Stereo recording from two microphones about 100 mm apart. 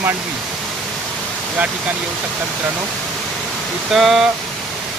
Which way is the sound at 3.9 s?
Centre (ahead or behind).